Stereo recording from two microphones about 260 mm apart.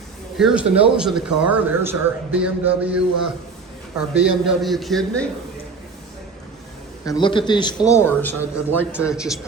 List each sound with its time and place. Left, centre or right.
0.3 s speech: centre
4.1 s speech: centre
7.0 s a man's voice: centre